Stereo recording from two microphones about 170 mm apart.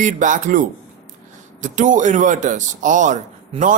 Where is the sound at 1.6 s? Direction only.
45° right (ahead or behind).